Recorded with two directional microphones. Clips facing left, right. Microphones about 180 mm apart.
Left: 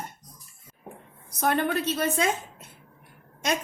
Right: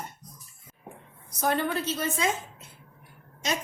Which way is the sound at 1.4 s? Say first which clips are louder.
Left 2 dB; 60° left (ahead or behind).